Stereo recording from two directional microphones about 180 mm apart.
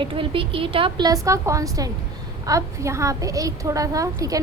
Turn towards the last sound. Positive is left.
turn(degrees=-20)  # may be behind; listen again after turning